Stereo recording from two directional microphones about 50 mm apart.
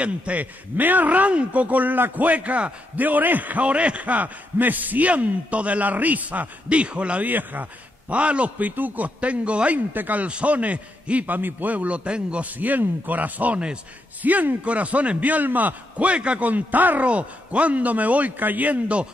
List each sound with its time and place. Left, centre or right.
0.0 s speech: right
7.2 s speech: right
8.1 s a man's voice: right